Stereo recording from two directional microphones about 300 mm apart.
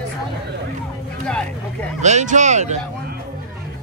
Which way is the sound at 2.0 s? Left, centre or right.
Right.